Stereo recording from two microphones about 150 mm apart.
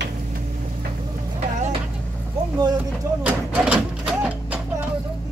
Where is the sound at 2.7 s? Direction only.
10° right (ahead or behind).